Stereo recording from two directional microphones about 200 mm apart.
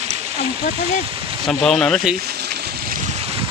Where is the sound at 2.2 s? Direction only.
55° right (ahead or behind).